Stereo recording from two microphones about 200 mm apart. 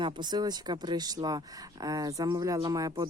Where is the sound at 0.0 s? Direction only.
20° right (ahead or behind).